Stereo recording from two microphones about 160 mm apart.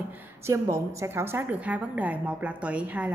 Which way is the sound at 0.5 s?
15° right (ahead or behind).